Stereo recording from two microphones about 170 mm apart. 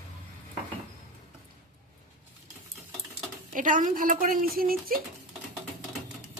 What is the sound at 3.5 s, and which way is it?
Speech, 50° right (ahead or behind).